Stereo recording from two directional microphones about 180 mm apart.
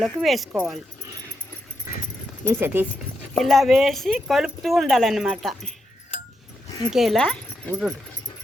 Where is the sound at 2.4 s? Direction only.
10° right (ahead or behind).